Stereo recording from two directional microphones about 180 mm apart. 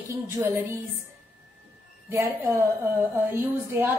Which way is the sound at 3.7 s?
15° right (ahead or behind).